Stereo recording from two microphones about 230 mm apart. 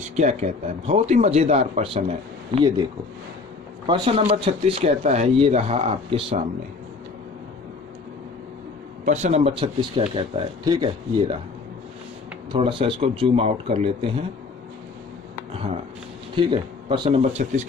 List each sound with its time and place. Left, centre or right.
0.0 s speech: right
9.0 s speech: right
12.5 s speech: right
15.5 s speech: right